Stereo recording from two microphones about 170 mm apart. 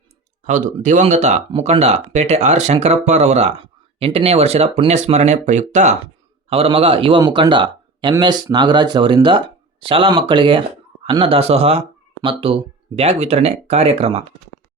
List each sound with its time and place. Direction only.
0.4 s speech: 50° right (ahead or behind)
1.5 s speech: 35° right (ahead or behind)